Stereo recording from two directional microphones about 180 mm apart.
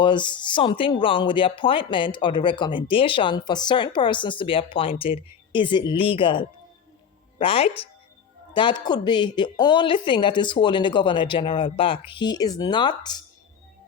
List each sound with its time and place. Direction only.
0.0 s speech: 25° left (ahead or behind)